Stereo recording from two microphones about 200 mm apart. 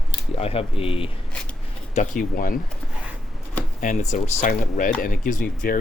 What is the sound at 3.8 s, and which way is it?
Speech, 40° left (ahead or behind).